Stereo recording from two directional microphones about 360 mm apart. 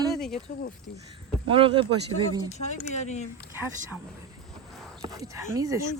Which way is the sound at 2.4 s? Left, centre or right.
Centre.